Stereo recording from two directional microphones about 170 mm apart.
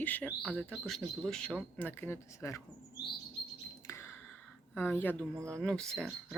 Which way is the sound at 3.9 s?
15° left (ahead or behind).